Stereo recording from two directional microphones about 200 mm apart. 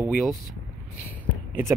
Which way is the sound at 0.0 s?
5° right (ahead or behind).